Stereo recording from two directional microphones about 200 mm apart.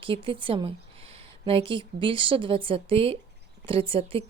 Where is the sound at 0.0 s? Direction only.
25° right (ahead or behind).